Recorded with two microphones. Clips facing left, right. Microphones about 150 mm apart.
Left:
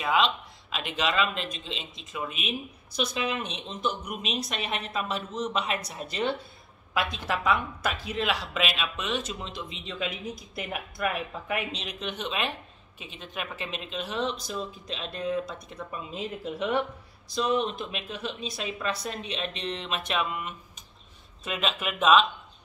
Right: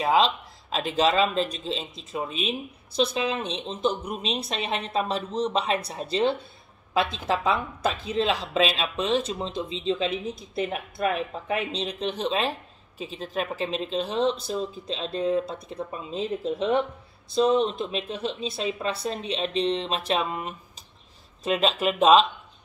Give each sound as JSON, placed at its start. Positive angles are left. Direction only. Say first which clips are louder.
{"t": 0.0, "sound": "speech", "louder": "right 4 dB", "side_deg": -35}